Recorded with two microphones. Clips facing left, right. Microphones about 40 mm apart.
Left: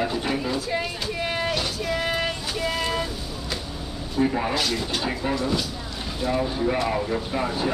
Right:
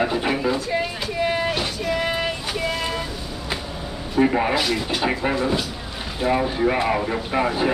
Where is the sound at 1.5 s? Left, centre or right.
Centre.